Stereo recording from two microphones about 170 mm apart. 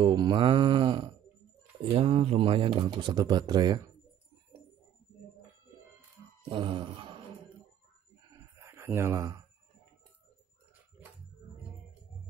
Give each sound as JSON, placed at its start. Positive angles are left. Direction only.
{"t": 0.0, "sound": "speech", "side_deg": -25}
{"t": 6.5, "sound": "speech", "side_deg": -30}
{"t": 8.2, "sound": "a sound", "side_deg": -20}